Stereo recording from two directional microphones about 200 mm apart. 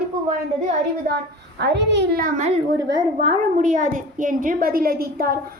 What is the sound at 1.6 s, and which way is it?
Speech, 60° right (ahead or behind).